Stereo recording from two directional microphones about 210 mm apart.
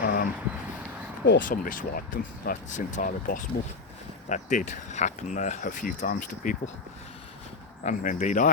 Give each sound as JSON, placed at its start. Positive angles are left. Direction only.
{"t": 0.0, "sound": "a sound", "side_deg": 45}
{"t": 1.2, "sound": "speech", "side_deg": 45}
{"t": 7.9, "sound": "speech", "side_deg": 35}